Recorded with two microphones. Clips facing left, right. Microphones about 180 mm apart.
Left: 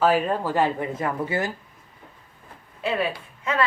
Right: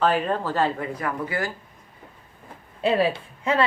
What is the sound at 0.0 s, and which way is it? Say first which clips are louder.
Speech: left 1 dB; 5° left (ahead or behind).